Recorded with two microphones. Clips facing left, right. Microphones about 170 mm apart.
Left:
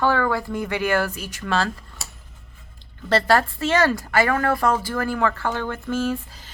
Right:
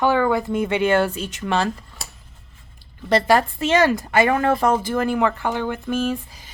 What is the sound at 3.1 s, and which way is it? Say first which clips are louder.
Speech: right 2 dB; 15° right (ahead or behind).